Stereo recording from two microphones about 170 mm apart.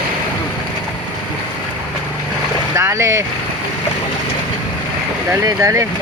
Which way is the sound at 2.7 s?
15° right (ahead or behind).